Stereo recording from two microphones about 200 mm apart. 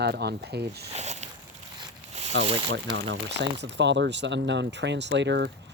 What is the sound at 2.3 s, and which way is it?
Speech, 60° right (ahead or behind).